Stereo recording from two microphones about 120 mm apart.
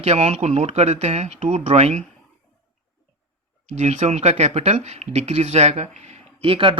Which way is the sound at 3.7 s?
70° right (ahead or behind).